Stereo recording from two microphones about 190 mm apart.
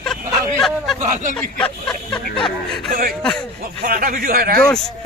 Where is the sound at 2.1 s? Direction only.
25° left (ahead or behind).